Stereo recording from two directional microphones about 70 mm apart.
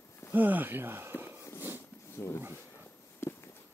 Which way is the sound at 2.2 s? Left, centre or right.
Left.